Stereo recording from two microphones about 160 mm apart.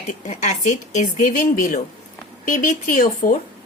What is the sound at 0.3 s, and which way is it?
A woman's voice, 50° left (ahead or behind).